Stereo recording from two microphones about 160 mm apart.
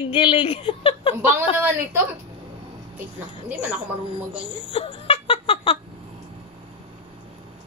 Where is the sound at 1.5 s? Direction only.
15° right (ahead or behind).